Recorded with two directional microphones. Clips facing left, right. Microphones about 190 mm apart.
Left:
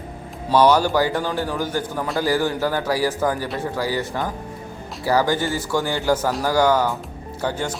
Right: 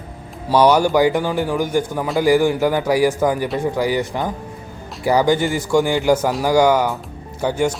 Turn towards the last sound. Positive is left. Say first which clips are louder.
# right 6 dB
turn(degrees=-15)  # may be behind; listen again after turning